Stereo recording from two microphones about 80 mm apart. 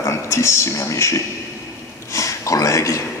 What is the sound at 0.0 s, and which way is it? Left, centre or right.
Speech, left.